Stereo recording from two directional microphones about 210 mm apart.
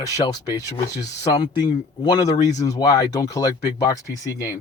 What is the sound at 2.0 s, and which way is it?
Speech, 20° left (ahead or behind).